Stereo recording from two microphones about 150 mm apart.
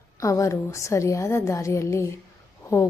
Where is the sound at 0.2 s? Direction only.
20° left (ahead or behind).